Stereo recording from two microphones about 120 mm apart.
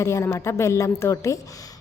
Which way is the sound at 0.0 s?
25° left (ahead or behind).